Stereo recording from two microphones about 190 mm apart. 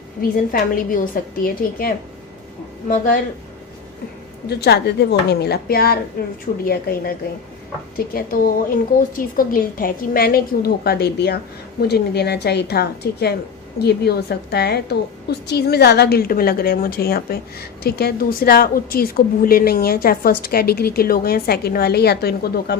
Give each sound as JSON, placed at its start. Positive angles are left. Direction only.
{"t": 0.2, "sound": "a woman's voice", "side_deg": 50}
{"t": 4.4, "sound": "a woman's voice", "side_deg": 60}